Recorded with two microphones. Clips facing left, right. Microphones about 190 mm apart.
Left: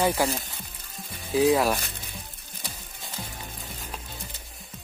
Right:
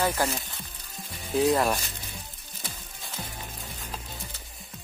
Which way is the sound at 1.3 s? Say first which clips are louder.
Left 2 dB; centre (ahead or behind).